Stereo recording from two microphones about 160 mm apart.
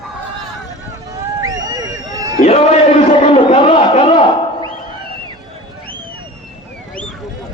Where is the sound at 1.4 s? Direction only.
25° right (ahead or behind).